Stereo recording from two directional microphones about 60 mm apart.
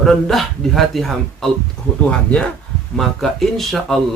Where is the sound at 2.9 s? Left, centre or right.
Centre.